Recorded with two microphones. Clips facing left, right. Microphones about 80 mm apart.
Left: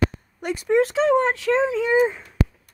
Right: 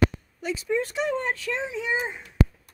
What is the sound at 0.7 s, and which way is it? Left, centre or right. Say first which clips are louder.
Speech: left 11 dB; left.